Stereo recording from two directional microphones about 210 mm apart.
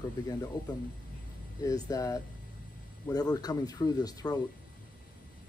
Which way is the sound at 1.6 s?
15° left (ahead or behind).